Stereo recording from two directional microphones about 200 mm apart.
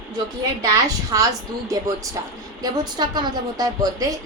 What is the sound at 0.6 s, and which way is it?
A woman's voice, 15° right (ahead or behind).